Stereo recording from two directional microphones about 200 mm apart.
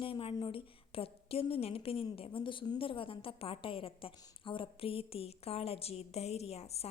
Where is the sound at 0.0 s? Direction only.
25° left (ahead or behind).